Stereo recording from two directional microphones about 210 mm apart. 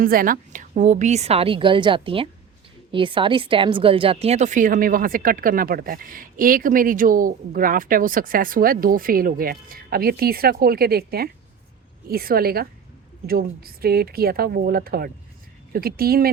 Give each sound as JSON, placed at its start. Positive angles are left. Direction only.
{"t": 0.0, "sound": "a woman's voice", "side_deg": -45}